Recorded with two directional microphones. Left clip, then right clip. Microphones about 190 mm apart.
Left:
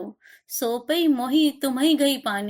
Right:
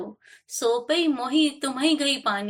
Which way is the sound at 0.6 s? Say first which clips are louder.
Even; 50° left (ahead or behind).